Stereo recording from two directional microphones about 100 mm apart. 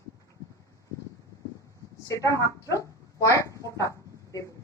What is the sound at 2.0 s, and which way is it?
A woman's voice, 30° left (ahead or behind).